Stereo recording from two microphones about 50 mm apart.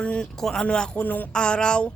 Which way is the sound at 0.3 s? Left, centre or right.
Centre.